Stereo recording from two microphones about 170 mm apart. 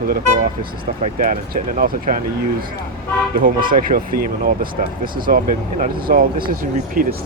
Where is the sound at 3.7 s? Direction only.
55° right (ahead or behind).